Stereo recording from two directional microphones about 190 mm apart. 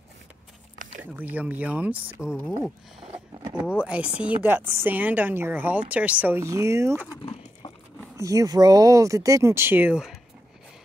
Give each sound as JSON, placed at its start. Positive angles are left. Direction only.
{"t": 1.1, "sound": "speech", "side_deg": -10}
{"t": 3.7, "sound": "speech", "side_deg": -5}
{"t": 7.1, "sound": "horse", "side_deg": 30}
{"t": 8.2, "sound": "speech", "side_deg": -15}